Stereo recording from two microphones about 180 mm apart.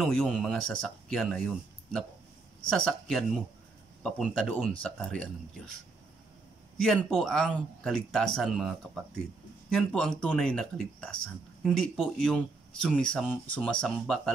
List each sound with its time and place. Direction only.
0.0 s speech: 5° left (ahead or behind)
6.8 s speech: centre (ahead or behind)